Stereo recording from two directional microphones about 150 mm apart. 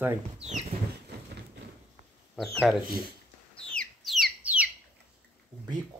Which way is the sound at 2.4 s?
Centre (ahead or behind).